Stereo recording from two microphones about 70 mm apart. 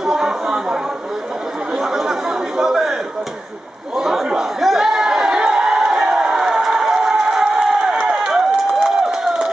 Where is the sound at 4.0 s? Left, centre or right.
Centre.